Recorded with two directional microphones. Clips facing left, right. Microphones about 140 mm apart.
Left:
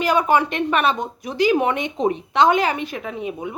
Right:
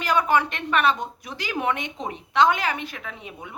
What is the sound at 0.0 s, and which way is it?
A woman's voice, 10° left (ahead or behind).